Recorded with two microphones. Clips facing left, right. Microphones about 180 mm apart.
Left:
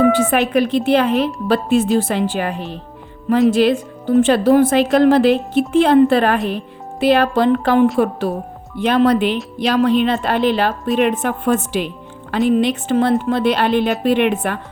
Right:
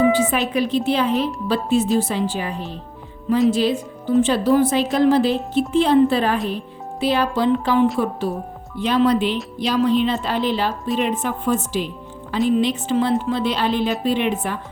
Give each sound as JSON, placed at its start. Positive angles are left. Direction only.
{"t": 0.0, "sound": "a woman's voice", "side_deg": 55}